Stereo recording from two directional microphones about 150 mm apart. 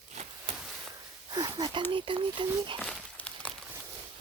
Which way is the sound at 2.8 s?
5° left (ahead or behind).